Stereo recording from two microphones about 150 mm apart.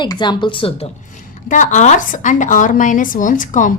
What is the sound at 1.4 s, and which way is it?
A woman's voice, 60° left (ahead or behind).